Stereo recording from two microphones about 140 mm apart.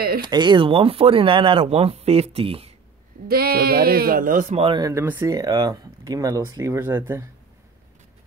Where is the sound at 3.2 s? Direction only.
90° right.